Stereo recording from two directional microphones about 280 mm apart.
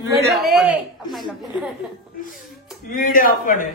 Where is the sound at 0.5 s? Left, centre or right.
Centre.